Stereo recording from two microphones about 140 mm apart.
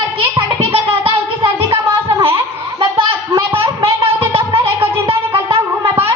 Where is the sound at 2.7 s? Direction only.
35° right (ahead or behind).